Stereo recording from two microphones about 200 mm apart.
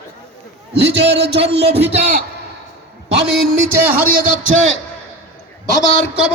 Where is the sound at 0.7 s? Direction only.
60° right (ahead or behind).